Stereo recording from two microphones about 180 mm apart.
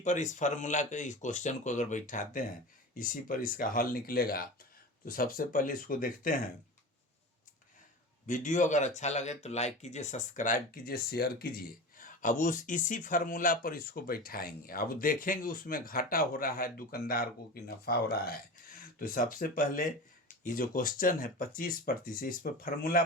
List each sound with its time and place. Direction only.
0.0 s speech: 45° left (ahead or behind)
8.3 s speech: 45° left (ahead or behind)